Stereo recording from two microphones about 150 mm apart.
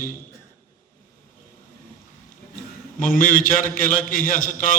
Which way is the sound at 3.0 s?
65° left (ahead or behind).